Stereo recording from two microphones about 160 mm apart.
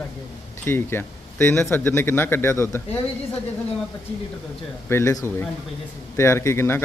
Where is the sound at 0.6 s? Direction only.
15° left (ahead or behind).